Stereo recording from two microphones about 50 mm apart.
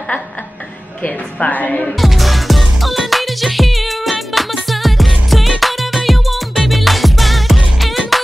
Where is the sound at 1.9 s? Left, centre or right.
Centre.